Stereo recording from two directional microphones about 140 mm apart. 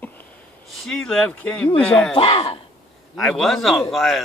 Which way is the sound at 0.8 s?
5° left (ahead or behind).